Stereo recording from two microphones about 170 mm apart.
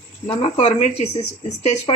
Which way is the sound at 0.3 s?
35° left (ahead or behind).